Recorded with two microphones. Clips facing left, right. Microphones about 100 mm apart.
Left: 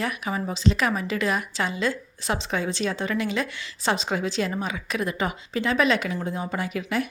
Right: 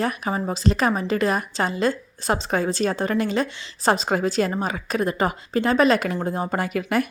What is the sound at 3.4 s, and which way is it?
Speech, 25° right (ahead or behind).